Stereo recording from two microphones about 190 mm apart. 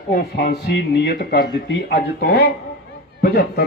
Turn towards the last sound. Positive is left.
turn(degrees=55)  # may be behind; listen again after turning